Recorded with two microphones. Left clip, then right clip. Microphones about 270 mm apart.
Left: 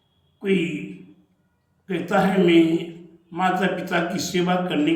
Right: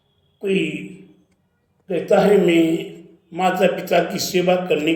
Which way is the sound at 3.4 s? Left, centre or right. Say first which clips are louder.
Right 4 dB; left.